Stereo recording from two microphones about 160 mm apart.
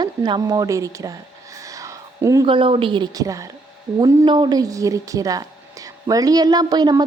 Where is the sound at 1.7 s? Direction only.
20° right (ahead or behind).